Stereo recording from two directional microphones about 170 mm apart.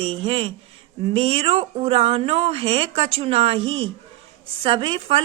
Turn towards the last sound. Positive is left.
turn(degrees=-30)  # may be behind; listen again after turning